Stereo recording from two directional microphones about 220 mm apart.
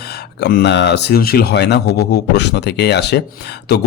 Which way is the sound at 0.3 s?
50° left (ahead or behind).